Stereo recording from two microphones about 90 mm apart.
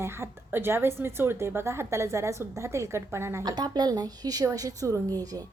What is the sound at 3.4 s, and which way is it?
A woman's voice, 50° right (ahead or behind).